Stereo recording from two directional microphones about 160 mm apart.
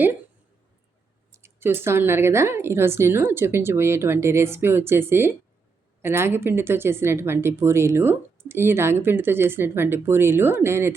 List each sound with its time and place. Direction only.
1.3 s speech: 15° right (ahead or behind)